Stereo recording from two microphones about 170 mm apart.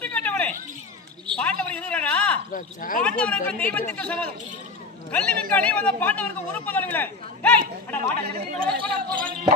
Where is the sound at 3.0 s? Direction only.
5° left (ahead or behind).